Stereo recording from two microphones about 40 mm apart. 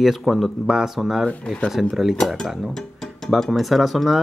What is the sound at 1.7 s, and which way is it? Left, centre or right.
Speech, centre.